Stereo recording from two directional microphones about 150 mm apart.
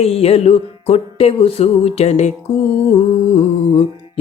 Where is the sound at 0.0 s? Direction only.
40° left (ahead or behind).